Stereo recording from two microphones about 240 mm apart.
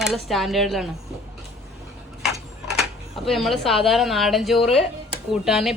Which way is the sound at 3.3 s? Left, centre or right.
Centre.